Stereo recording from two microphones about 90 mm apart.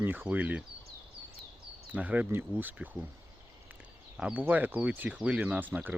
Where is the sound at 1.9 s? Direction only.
20° right (ahead or behind).